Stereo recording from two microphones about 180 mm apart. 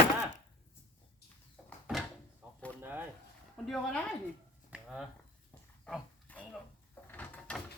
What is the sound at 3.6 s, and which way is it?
Speech, centre (ahead or behind).